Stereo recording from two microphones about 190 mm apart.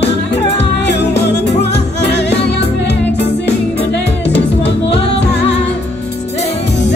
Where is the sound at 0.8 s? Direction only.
60° left (ahead or behind).